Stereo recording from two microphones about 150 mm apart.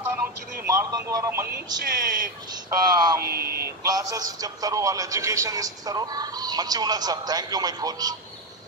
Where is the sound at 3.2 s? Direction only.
90° right.